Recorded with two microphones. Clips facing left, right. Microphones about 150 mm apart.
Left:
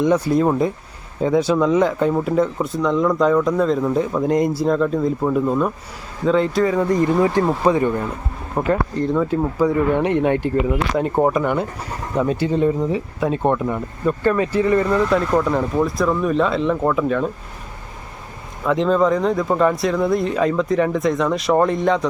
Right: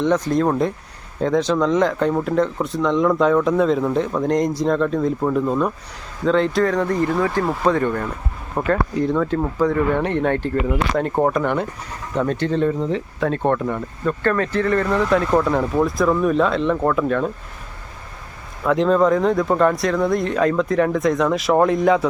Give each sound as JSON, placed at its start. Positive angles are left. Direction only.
{"t": 0.0, "sound": "speech", "side_deg": 10}
{"t": 7.1, "sound": "speech", "side_deg": 20}
{"t": 18.6, "sound": "speech", "side_deg": 0}